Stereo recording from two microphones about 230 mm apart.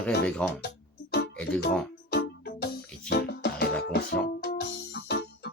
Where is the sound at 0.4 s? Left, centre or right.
Centre.